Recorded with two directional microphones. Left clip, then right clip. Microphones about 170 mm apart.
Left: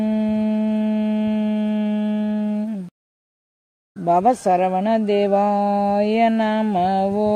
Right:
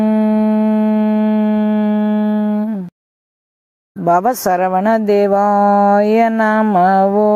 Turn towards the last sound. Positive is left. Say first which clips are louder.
# right 8 dB
turn(degrees=-5)  # may be behind; listen again after turning